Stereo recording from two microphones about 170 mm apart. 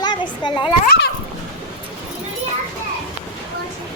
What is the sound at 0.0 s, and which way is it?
Speech, 25° left (ahead or behind).